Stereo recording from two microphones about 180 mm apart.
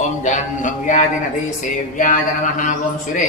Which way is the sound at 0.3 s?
45° left (ahead or behind).